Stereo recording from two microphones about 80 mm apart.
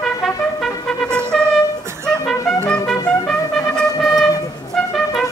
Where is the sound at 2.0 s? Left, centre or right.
Centre.